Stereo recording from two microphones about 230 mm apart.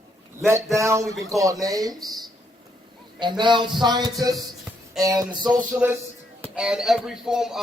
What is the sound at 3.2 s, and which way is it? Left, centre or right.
Speech, centre.